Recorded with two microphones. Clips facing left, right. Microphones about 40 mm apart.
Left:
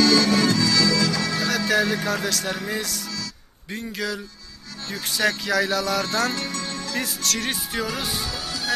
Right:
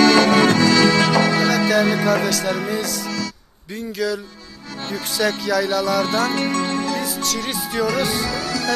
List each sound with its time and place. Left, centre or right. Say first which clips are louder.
0.0 s music: right 5 dB; right
2.0 s music: right 7 dB; right
2.2 s music: right 5 dB; right
3.7 s speech: right 5 dB; left
5.7 s music: right 4 dB; right
7.8 s music: right 8 dB; centre